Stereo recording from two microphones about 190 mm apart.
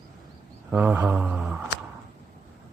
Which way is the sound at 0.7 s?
10° right (ahead or behind).